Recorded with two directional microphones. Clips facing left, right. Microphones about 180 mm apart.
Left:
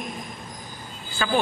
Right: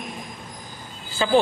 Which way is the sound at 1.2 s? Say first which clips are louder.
Right 5 dB; 25° right (ahead or behind).